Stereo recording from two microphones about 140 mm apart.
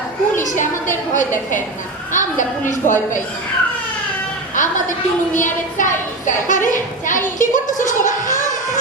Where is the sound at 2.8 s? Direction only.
65° left (ahead or behind).